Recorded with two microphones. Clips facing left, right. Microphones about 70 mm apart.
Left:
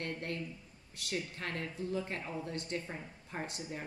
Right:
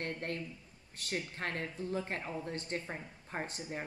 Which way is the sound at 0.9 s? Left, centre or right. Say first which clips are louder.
Even; right.